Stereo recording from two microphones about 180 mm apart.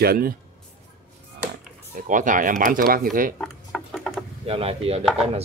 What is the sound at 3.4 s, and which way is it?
Patter, centre (ahead or behind).